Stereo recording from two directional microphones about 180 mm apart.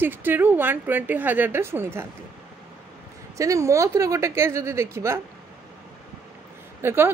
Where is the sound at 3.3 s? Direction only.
15° right (ahead or behind).